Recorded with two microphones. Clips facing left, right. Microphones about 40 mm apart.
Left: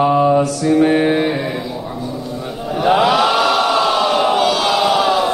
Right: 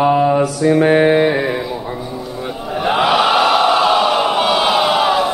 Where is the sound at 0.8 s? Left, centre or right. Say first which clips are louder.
Right 2 dB; right.